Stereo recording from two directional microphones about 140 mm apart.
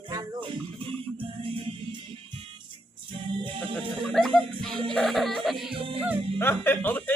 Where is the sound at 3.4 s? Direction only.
35° right (ahead or behind).